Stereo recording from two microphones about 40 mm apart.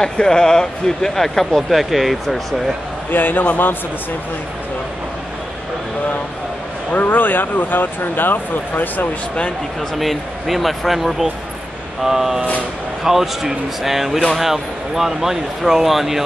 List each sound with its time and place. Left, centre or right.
0.0 s speech: centre
3.1 s speech: left
6.9 s speech: left
9.9 s speech: centre